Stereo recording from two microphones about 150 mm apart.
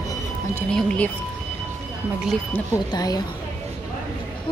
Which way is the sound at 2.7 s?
25° left (ahead or behind).